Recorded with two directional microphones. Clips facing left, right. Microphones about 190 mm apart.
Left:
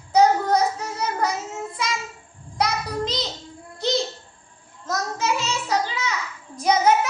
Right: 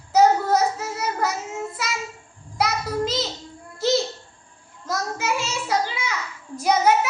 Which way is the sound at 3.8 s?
5° right (ahead or behind).